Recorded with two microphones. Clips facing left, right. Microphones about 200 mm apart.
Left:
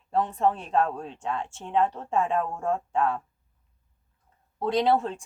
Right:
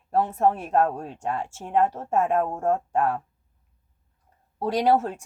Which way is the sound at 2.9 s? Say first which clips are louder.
Right 2 dB; 10° right (ahead or behind).